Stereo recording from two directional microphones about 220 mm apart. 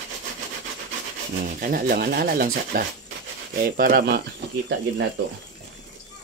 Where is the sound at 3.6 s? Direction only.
40° right (ahead or behind).